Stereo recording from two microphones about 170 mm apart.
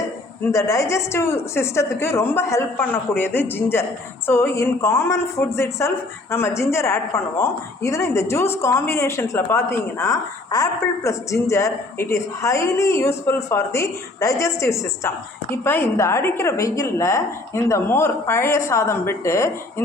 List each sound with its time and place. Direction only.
0.5 s a woman's voice: 20° left (ahead or behind)